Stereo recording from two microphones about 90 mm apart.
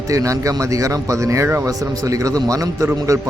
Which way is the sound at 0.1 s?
35° right (ahead or behind).